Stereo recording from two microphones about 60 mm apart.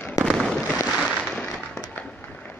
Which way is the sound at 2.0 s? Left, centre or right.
Left.